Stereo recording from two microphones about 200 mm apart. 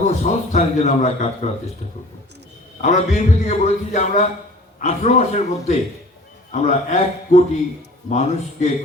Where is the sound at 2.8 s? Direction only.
35° left (ahead or behind).